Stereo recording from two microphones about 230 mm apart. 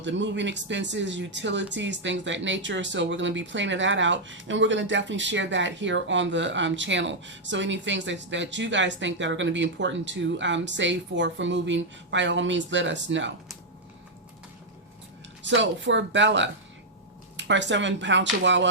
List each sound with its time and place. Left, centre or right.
0.0 s speech: right
15.4 s speech: right